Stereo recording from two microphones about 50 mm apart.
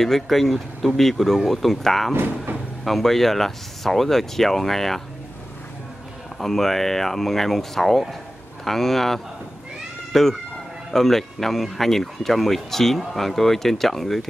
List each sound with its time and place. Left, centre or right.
0.0 s speech: centre
2.1 s speech: right
2.8 s speech: centre
6.4 s speech: centre